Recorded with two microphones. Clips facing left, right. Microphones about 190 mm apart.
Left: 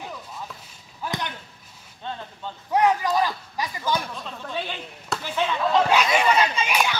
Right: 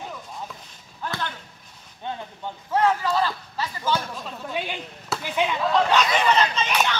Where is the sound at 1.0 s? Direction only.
15° left (ahead or behind).